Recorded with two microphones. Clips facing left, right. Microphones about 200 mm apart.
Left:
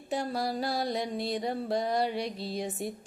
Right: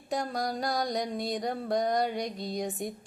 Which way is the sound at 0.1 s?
5° left (ahead or behind).